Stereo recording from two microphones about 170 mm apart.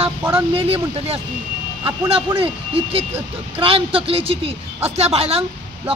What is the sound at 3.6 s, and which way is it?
A woman's voice, 35° right (ahead or behind).